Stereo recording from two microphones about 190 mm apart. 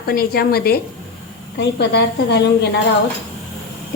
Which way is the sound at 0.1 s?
55° left (ahead or behind).